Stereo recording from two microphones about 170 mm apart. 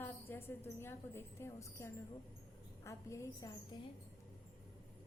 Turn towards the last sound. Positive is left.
turn(degrees=20)  # may be behind; listen again after turning